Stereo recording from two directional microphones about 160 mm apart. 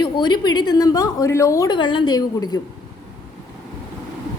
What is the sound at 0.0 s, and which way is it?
A woman's voice, 25° left (ahead or behind).